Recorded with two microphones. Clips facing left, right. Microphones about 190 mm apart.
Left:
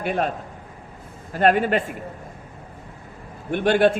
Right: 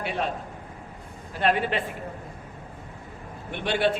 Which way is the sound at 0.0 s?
50° left (ahead or behind).